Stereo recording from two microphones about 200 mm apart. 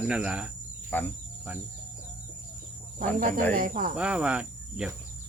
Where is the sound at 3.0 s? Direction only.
45° right (ahead or behind).